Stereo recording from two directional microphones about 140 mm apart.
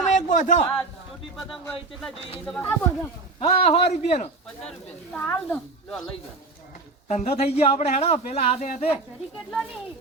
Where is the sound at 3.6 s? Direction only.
45° left (ahead or behind).